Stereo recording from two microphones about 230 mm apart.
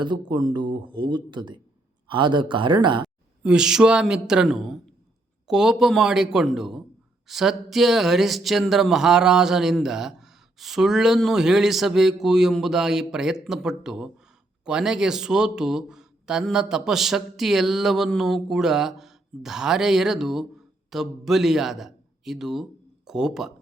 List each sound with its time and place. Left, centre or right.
0.0 s speech: centre
3.4 s a man's voice: centre